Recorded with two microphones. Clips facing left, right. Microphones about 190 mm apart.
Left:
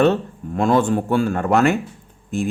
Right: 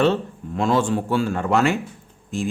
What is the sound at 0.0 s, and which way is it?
Speech, 50° left (ahead or behind).